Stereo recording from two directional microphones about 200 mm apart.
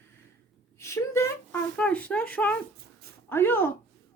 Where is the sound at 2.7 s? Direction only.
50° right (ahead or behind).